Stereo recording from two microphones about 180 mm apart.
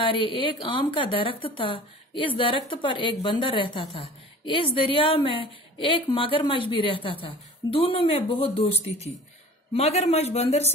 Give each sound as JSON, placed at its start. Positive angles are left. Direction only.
{"t": 0.0, "sound": "a man's voice", "side_deg": 30}